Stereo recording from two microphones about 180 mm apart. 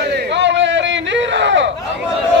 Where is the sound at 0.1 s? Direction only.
80° right.